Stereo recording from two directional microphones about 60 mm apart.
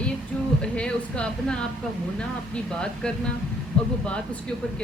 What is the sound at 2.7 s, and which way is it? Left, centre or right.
A woman's voice, centre.